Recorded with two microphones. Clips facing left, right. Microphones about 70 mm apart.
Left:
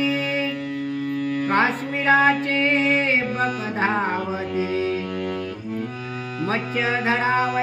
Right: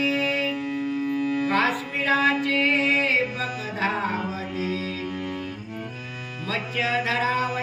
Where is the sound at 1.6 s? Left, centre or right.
Left.